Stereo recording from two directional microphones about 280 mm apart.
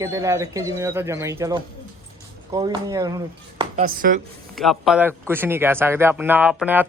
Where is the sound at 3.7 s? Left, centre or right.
Right.